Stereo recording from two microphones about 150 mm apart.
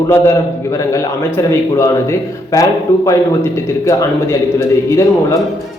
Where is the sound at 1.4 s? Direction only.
20° left (ahead or behind).